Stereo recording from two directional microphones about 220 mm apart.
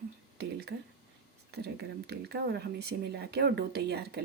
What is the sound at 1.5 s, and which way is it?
Speech, 50° right (ahead or behind).